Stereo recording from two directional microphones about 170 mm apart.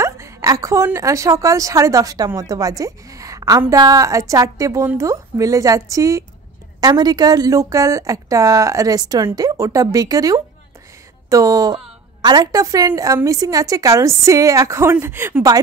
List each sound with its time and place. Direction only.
0.0 s a woman's voice: 15° right (ahead or behind)